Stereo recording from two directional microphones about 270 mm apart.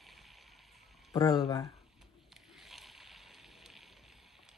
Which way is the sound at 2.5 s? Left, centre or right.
Centre.